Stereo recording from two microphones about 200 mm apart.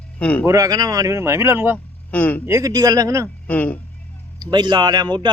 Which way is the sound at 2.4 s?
15° right (ahead or behind).